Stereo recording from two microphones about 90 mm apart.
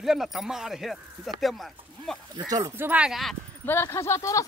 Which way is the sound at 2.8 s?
20° right (ahead or behind).